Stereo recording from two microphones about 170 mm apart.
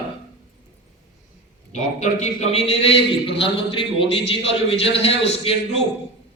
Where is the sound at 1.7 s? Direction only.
45° left (ahead or behind).